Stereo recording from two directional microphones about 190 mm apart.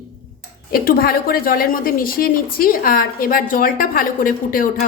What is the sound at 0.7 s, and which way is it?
A woman's voice, 50° left (ahead or behind).